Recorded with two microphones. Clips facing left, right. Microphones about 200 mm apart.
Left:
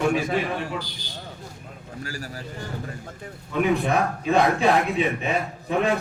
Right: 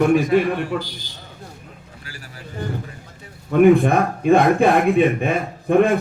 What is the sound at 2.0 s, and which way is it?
Speech, 40° left (ahead or behind).